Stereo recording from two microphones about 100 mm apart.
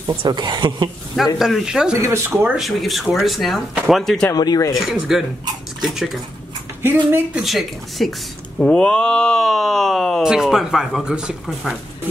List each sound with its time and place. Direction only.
0.3 s a woman's voice: 45° right (ahead or behind)
1.1 s speech: centre (ahead or behind)
2.0 s speech: 25° right (ahead or behind)
2.5 s speech: centre (ahead or behind)
4.3 s speech: 40° left (ahead or behind)
4.7 s speech: centre (ahead or behind)
6.8 s speech: 20° right (ahead or behind)
7.4 s speech: centre (ahead or behind)